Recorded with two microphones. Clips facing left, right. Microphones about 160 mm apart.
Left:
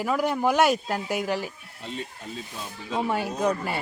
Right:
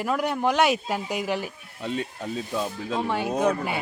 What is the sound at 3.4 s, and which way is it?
Speech, 5° right (ahead or behind).